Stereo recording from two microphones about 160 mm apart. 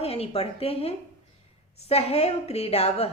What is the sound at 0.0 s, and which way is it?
A woman's voice, 40° left (ahead or behind).